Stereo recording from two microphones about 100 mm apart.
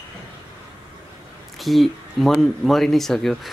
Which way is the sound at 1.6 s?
Centre (ahead or behind).